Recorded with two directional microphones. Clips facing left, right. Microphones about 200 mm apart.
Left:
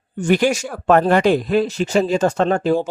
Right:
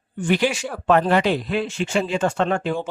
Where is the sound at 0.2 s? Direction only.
45° left (ahead or behind).